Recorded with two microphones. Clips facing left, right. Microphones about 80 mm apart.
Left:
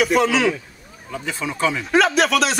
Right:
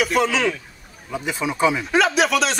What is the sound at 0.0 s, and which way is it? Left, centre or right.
Speech, centre.